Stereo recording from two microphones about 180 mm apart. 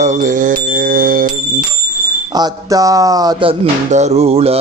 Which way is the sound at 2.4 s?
20° right (ahead or behind).